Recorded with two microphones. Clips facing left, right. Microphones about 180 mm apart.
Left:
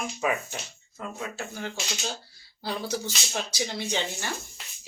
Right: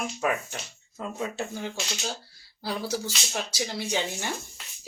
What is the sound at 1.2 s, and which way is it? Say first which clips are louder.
Speech: right 4 dB; 20° right (ahead or behind).